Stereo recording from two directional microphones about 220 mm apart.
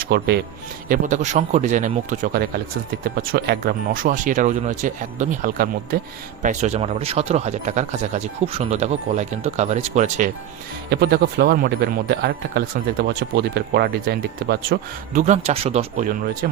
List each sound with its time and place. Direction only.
0.1 s speech: 50° right (ahead or behind)
0.9 s speech: 35° right (ahead or behind)
10.8 s speech: 45° right (ahead or behind)